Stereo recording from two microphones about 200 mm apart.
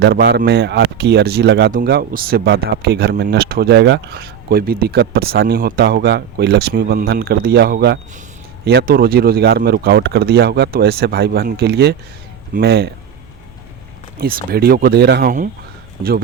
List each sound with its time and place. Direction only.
0.0 s speech: 60° right (ahead or behind)
14.2 s speech: 45° right (ahead or behind)